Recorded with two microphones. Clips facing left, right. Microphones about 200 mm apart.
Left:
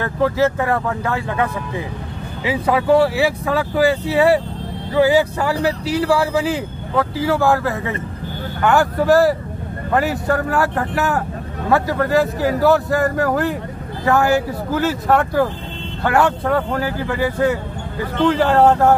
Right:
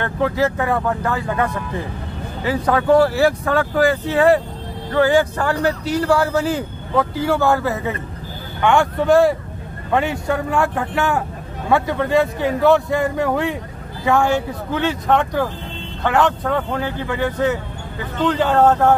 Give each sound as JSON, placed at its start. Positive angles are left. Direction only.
{"t": 0.0, "sound": "speech", "side_deg": 0}